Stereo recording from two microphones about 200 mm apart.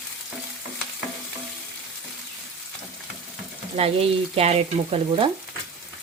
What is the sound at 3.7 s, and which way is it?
Frying, 30° right (ahead or behind).